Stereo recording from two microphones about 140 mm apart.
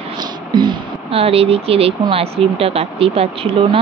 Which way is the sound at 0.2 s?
30° right (ahead or behind).